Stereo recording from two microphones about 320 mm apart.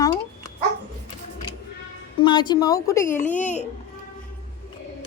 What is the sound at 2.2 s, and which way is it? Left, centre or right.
Speech, centre.